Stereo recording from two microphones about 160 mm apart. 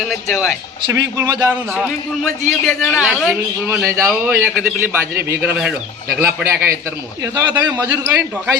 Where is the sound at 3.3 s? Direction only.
15° right (ahead or behind).